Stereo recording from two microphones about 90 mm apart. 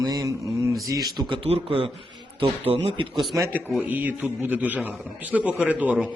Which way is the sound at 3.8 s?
20° right (ahead or behind).